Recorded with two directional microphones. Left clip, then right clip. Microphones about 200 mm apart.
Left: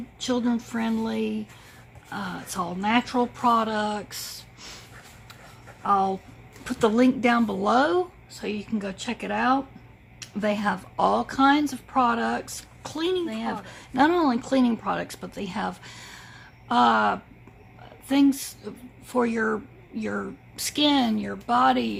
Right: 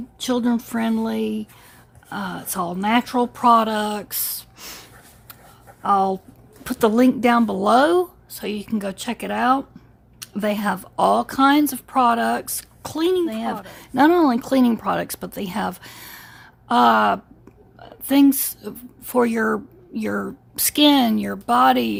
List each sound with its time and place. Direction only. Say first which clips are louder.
0.2 s speech: right 4 dB; 50° right (ahead or behind)